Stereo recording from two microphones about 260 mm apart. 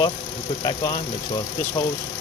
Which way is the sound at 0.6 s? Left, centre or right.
Centre.